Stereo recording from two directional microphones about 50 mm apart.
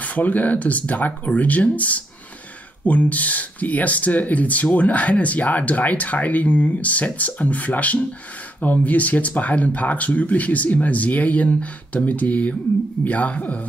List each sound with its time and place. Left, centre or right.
0.0 s speech: left